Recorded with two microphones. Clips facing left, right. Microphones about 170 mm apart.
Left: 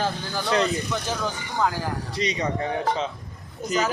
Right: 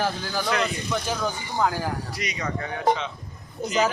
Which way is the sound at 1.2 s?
15° right (ahead or behind).